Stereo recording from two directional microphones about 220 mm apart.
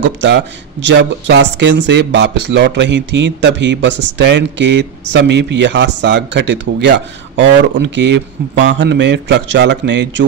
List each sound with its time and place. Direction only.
0.0 s speech: 55° right (ahead or behind)